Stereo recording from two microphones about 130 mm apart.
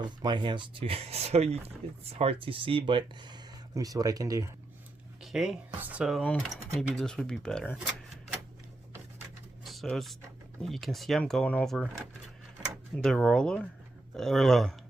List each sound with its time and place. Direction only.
0.0 s speech: 35° right (ahead or behind)
5.2 s speech: 5° right (ahead or behind)
9.8 s speech: centre (ahead or behind)